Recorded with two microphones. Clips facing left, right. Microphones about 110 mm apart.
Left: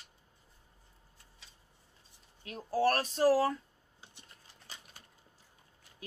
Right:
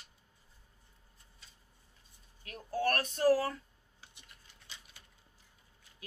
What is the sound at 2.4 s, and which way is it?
Speech, 25° left (ahead or behind).